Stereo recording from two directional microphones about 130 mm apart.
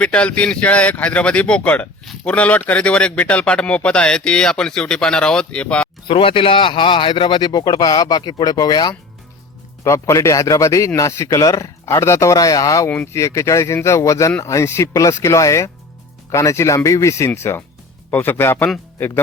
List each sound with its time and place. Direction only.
0.0 s speech: 10° left (ahead or behind)
6.1 s a man's voice: 40° left (ahead or behind); by 19.2 s 15° left (ahead or behind)